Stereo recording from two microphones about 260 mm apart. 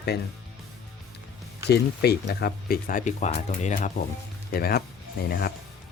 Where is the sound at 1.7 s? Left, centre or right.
Left.